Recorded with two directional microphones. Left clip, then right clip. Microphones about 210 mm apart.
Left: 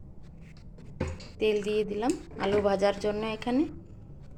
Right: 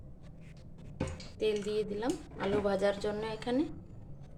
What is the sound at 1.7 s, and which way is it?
Speech, 25° right (ahead or behind).